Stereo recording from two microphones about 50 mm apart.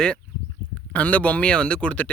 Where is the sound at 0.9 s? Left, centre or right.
Left.